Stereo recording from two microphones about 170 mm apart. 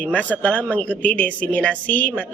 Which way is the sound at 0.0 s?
10° left (ahead or behind).